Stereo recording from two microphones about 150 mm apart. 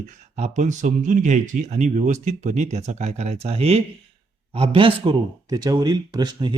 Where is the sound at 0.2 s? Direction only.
50° right (ahead or behind).